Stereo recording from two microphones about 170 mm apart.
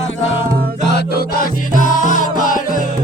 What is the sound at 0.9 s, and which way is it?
Music, 65° left (ahead or behind).